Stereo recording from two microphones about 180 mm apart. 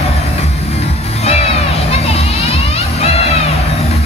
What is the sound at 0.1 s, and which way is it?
Music, 35° left (ahead or behind).